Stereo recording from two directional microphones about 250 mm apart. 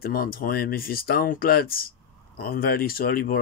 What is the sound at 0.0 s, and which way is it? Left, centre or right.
Speech, left.